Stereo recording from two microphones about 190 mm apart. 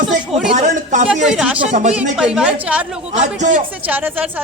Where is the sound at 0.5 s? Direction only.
40° right (ahead or behind).